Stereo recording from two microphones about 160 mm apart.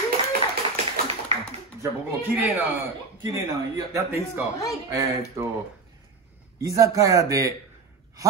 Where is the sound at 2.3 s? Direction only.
10° right (ahead or behind).